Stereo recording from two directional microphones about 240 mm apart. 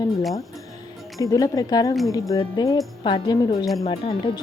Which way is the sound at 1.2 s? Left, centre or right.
Centre.